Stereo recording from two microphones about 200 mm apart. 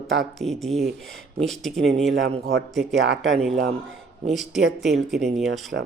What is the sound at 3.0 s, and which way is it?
Speech, 65° right (ahead or behind).